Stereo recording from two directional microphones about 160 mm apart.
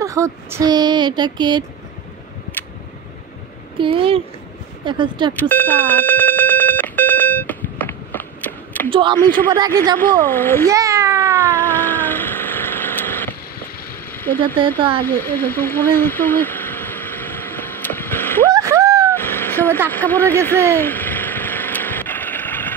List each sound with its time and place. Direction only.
0.0 s speech: 20° right (ahead or behind)
3.7 s speech: 30° right (ahead or behind)
5.3 s telephone bell ringing: 10° left (ahead or behind)
8.9 s speech: 30° right (ahead or behind)
9.9 s speech: 10° left (ahead or behind)
10.7 s babbling: 20° right (ahead or behind)
11.3 s a sound: 10° left (ahead or behind)
18.5 s a sound: 20° right (ahead or behind)
19.1 s vehicle: 15° left (ahead or behind)
19.9 s speech: 10° left (ahead or behind)
20.4 s engine: 10° left (ahead or behind)